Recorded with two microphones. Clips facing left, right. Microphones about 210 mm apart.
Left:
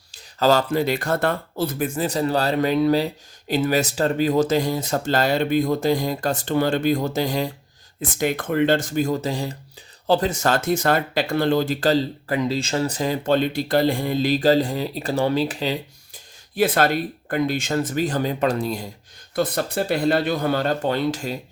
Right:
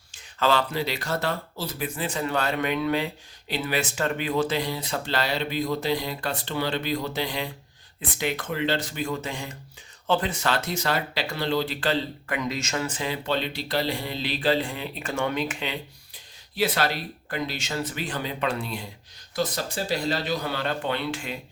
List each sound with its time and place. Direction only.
0.1 s speech: 40° left (ahead or behind)
16.6 s speech: 50° left (ahead or behind)
19.4 s speech: 60° left (ahead or behind); by 21.3 s 40° left (ahead or behind)